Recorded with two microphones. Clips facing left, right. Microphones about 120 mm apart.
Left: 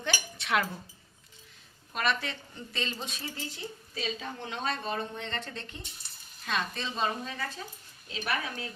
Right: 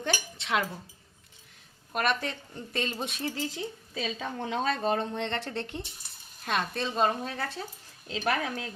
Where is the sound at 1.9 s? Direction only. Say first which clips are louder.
Right 2 dB; 50° right (ahead or behind).